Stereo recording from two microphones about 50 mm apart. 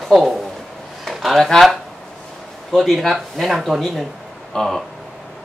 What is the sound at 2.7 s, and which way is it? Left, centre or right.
A woman's voice, centre.